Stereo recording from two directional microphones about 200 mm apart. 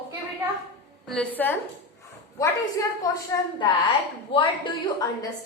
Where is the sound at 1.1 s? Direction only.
5° left (ahead or behind).